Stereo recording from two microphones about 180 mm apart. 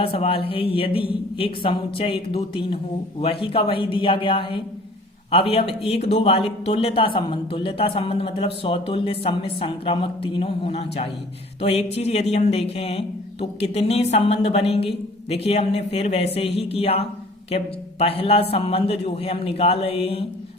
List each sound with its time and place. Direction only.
0.0 s a man's voice: 30° left (ahead or behind)